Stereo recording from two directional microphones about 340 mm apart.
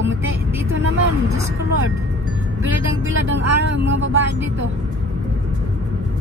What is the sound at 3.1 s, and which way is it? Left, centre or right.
Speech, right.